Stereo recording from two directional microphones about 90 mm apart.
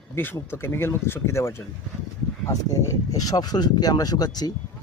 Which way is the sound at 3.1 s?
45° left (ahead or behind).